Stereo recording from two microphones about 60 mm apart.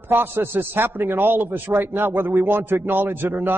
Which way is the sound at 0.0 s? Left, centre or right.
Right.